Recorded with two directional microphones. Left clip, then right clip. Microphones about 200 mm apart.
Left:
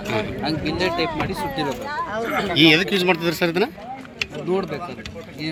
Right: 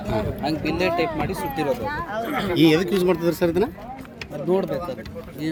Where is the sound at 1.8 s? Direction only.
45° left (ahead or behind).